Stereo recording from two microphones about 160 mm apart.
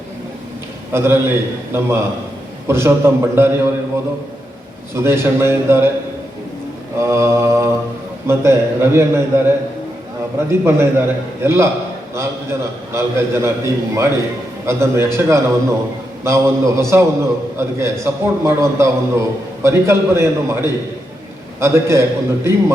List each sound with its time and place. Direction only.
0.9 s a man's voice: 15° right (ahead or behind)
7.0 s a man's voice: 15° right (ahead or behind)